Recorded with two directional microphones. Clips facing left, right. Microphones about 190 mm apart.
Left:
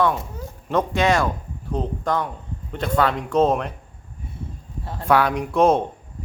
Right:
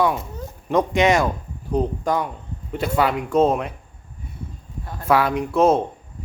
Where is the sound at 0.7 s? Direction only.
15° right (ahead or behind).